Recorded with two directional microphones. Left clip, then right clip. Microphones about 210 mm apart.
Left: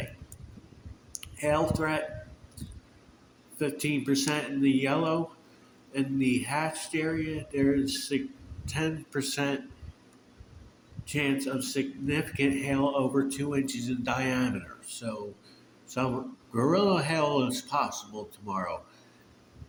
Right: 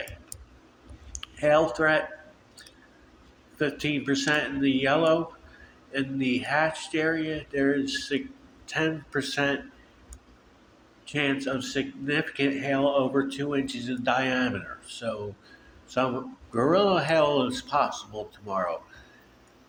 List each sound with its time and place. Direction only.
1.2 s speech: 35° left (ahead or behind)
3.6 s speech: 35° left (ahead or behind)
11.0 s speech: 35° left (ahead or behind)